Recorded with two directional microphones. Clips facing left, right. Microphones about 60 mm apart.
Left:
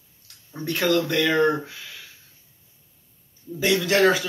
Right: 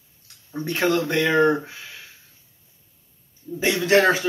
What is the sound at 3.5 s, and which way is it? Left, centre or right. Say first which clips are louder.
Speech: right 2 dB; right.